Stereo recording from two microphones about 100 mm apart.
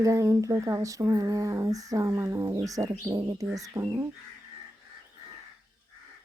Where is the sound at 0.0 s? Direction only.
30° right (ahead or behind).